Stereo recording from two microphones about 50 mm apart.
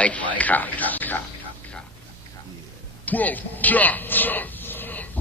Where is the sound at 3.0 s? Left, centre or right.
Left.